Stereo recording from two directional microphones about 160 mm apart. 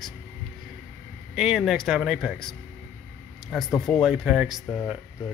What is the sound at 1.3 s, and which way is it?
Speech, centre (ahead or behind).